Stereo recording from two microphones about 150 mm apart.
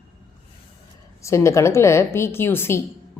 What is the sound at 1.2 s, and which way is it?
A woman's voice, 20° left (ahead or behind).